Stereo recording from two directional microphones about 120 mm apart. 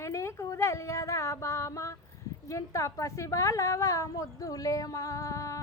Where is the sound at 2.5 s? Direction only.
25° left (ahead or behind).